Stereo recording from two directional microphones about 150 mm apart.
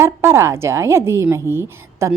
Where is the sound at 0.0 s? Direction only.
15° right (ahead or behind).